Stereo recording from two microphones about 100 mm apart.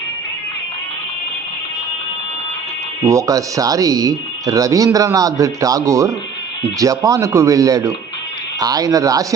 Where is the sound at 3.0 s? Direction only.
35° right (ahead or behind).